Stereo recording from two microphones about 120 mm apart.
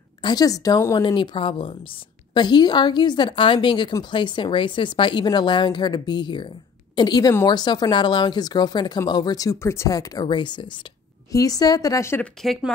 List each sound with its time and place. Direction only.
0.2 s a woman's voice: 35° left (ahead or behind)
1.0 s a woman's voice: 45° left (ahead or behind)
11.3 s a woman's voice: 30° left (ahead or behind)
12.2 s speech: centre (ahead or behind)